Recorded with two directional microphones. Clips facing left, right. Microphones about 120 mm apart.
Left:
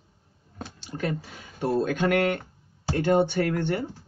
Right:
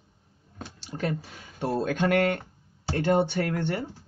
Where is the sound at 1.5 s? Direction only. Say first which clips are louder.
Left 2 dB; 30° right (ahead or behind).